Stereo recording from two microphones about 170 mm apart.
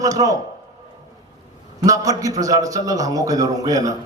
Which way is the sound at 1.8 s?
20° right (ahead or behind).